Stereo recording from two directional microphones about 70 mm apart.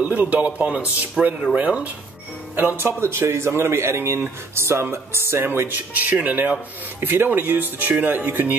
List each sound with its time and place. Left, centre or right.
0.0 s speech: right
2.5 s speech: right